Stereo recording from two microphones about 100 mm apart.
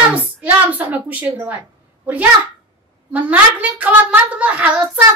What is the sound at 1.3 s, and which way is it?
Speech, 15° right (ahead or behind).